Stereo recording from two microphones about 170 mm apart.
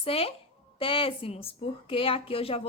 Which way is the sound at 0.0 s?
35° left (ahead or behind).